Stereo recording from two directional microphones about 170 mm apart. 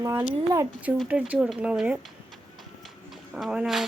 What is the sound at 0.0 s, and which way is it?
Speech, 10° right (ahead or behind).